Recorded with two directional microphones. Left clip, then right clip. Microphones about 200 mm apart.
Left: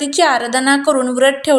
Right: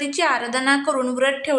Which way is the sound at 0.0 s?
20° left (ahead or behind).